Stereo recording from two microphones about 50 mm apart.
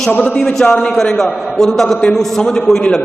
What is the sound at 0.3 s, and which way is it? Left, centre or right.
A man's voice, centre.